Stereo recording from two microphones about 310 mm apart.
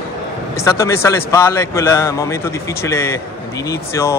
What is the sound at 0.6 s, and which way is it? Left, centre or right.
A man's voice, centre.